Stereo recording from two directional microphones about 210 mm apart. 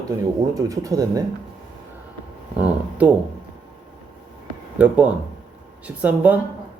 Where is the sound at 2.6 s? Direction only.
5° right (ahead or behind).